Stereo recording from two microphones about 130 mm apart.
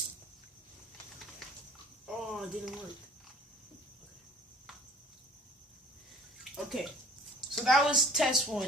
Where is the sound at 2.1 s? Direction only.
Centre (ahead or behind).